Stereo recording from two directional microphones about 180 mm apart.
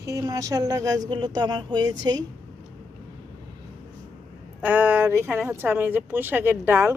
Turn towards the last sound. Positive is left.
turn(degrees=-15)  # may be behind; listen again after turning